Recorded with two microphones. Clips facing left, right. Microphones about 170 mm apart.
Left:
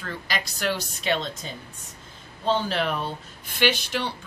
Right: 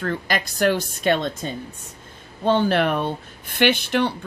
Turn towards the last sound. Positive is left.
turn(degrees=-55)  # may be behind; listen again after turning